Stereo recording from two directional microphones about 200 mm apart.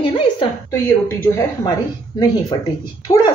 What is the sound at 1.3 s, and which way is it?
Speech, 15° left (ahead or behind).